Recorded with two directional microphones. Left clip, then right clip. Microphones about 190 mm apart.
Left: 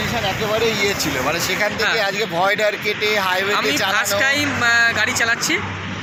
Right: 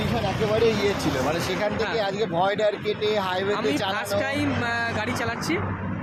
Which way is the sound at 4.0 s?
5° right (ahead or behind).